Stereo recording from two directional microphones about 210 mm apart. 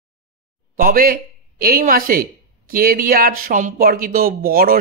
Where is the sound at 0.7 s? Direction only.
40° right (ahead or behind).